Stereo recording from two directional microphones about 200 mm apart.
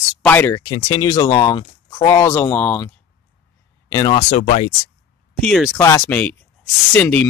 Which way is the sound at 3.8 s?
20° left (ahead or behind).